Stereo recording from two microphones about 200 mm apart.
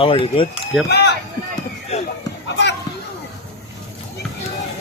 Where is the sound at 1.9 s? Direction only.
30° left (ahead or behind).